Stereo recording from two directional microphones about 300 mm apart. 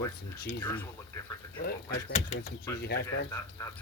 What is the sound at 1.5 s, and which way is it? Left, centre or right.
Speech, left.